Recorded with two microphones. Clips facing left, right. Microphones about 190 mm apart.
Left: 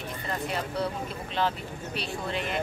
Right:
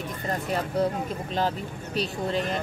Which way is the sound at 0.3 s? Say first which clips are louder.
Right 4 dB; 40° right (ahead or behind).